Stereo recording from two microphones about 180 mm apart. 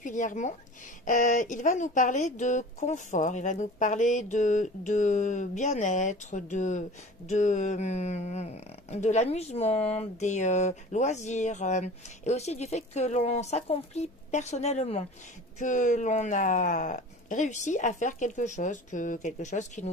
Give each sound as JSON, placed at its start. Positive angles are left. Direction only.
{"t": 0.0, "sound": "speech", "side_deg": 45}